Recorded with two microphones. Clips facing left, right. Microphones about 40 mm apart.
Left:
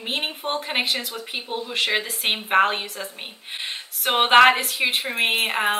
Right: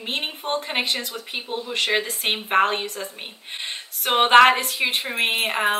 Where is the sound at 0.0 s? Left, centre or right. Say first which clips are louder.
Left 1 dB; centre.